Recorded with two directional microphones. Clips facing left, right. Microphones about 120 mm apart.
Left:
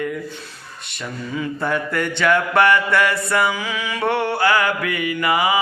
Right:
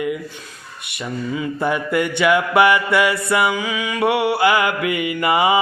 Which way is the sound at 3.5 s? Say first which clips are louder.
Right 3 dB; centre (ahead or behind).